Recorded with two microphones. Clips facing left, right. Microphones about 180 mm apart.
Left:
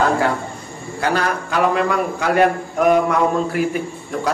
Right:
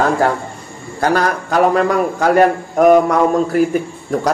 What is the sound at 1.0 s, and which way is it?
A man's voice, 40° right (ahead or behind).